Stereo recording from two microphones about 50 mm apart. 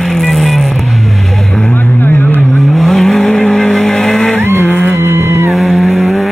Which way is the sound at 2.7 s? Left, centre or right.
Centre.